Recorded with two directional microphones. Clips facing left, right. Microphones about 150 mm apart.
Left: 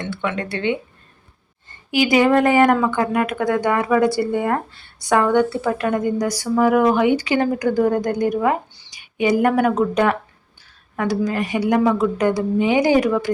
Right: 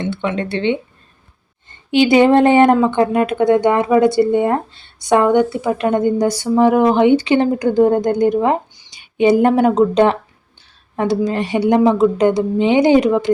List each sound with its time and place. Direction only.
0.0 s speech: 25° right (ahead or behind)